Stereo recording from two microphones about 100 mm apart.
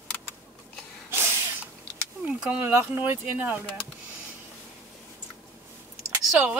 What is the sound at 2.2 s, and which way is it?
Speech, 25° right (ahead or behind).